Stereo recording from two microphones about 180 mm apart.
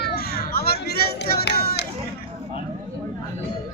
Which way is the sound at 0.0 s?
60° left (ahead or behind).